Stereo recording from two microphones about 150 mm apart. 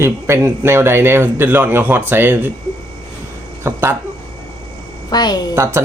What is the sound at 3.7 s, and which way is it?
Speech, 15° right (ahead or behind).